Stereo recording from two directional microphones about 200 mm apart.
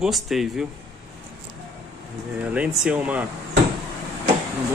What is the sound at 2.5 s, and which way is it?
Speech, 5° right (ahead or behind).